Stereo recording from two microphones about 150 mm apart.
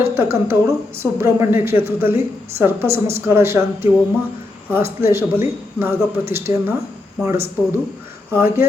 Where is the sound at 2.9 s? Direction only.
45° right (ahead or behind).